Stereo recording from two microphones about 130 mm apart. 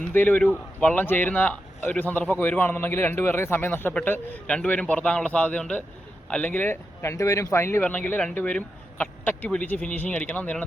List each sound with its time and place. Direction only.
0.1 s speech: 15° left (ahead or behind)